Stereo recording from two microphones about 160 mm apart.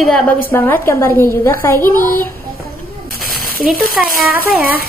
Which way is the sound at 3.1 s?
65° right (ahead or behind).